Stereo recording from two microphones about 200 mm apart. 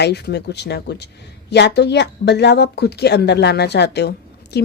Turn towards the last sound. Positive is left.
turn(degrees=55)  # may be behind; listen again after turning